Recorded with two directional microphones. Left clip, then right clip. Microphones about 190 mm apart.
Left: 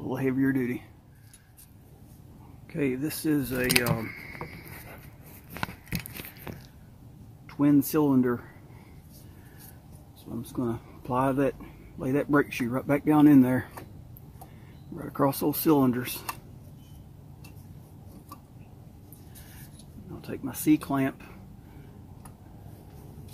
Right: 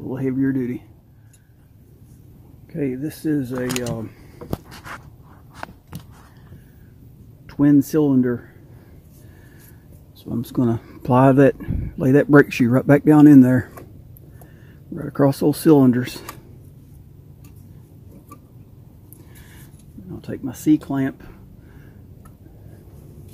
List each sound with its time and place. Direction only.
0.0 s speech: 10° right (ahead or behind)
2.7 s speech: 5° right (ahead or behind)
7.5 s speech: 30° right (ahead or behind)
10.3 s speech: 45° right (ahead or behind)
15.0 s speech: 30° right (ahead or behind)
20.2 s speech: 40° right (ahead or behind)